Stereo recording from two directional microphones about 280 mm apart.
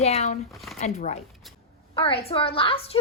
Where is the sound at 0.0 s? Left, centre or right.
Left.